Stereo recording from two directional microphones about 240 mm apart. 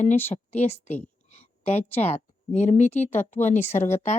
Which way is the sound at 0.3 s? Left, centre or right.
Left.